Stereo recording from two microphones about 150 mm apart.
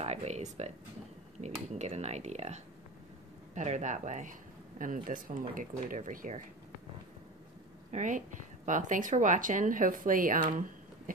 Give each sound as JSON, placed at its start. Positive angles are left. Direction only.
{"t": 0.0, "sound": "speech", "side_deg": -45}
{"t": 1.8, "sound": "speech", "side_deg": -50}
{"t": 7.9, "sound": "speech", "side_deg": -55}